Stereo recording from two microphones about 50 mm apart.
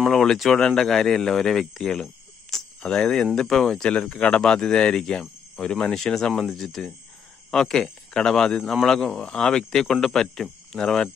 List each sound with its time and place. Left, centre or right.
0.1 s speech: centre
3.9 s speech: left